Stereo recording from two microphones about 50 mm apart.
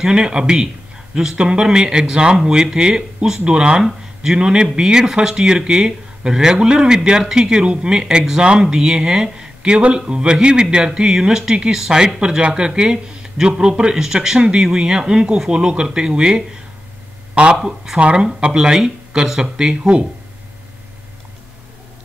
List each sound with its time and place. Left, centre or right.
0.0 s speech: centre
17.3 s a sound: right
17.9 s speech: right